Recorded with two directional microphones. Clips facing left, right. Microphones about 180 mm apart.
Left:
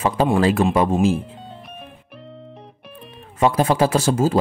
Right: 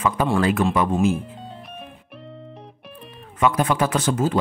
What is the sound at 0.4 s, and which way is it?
Speech, 30° left (ahead or behind).